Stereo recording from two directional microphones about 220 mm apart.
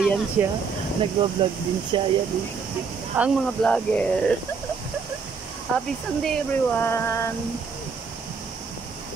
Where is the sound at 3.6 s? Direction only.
5° left (ahead or behind).